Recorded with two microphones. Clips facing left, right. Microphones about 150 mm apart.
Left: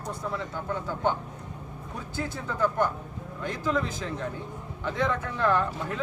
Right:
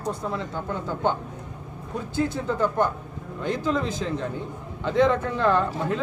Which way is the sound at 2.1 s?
20° right (ahead or behind).